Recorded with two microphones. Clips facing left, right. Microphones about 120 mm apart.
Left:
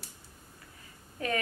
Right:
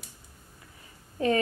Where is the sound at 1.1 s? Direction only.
30° right (ahead or behind).